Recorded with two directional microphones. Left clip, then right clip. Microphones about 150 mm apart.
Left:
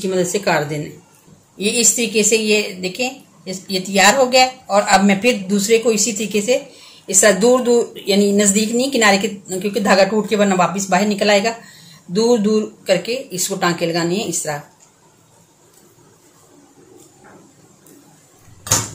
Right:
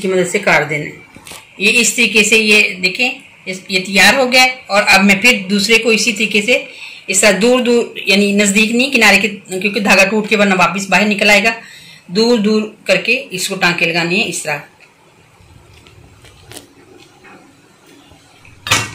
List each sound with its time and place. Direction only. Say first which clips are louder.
0.0 s a woman's voice: right 4 dB; 25° left (ahead or behind)